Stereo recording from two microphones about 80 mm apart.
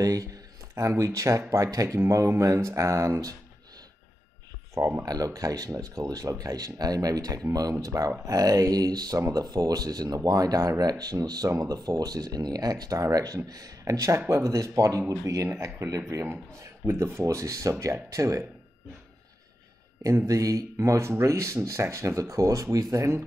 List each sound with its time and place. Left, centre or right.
0.0 s speech: right
4.7 s speech: right
5.0 s speech: right
20.0 s speech: right